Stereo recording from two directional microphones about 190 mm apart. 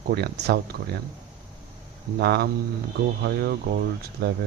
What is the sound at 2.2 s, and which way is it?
Speech, 55° right (ahead or behind).